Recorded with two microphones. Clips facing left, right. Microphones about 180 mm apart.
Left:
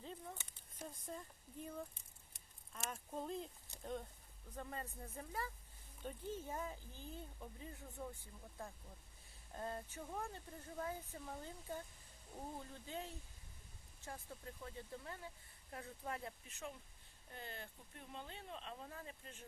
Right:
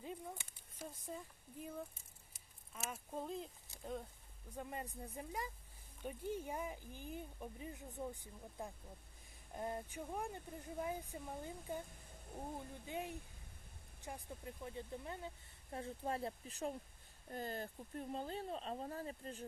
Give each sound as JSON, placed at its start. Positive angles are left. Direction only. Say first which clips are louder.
{"t": 0.0, "sound": "a sound", "louder": "right 3 dB", "side_deg": -10}
{"t": 2.3, "sound": "speech", "louder": "right 1 dB", "side_deg": -5}
{"t": 4.5, "sound": "speech", "louder": "right 2 dB", "side_deg": -15}